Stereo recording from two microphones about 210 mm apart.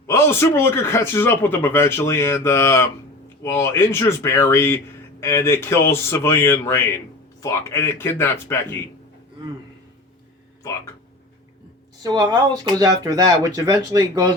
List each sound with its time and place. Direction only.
0.1 s speech: 10° left (ahead or behind)
10.6 s speech: 15° left (ahead or behind)
12.0 s speech: 20° right (ahead or behind)